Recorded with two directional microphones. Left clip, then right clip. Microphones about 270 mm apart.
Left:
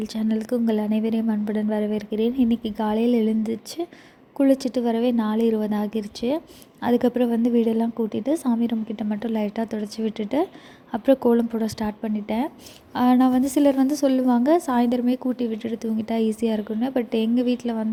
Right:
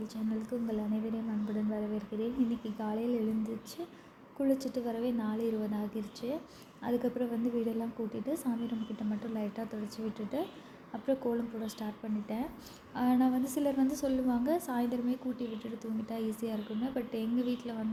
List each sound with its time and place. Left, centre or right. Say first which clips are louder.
0.0 s a woman's voice: left 12 dB; left